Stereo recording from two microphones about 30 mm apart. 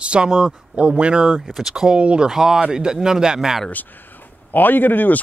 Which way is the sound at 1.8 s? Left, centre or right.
Right.